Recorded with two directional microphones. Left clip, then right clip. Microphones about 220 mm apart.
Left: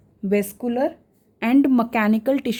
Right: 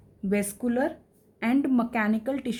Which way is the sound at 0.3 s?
40° left (ahead or behind).